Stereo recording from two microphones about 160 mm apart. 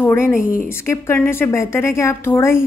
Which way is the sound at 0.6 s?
15° left (ahead or behind).